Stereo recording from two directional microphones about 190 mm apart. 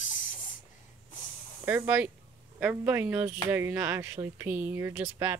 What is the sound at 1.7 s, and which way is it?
Speech, 10° right (ahead or behind).